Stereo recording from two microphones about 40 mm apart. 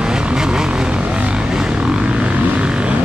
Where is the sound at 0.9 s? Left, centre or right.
Right.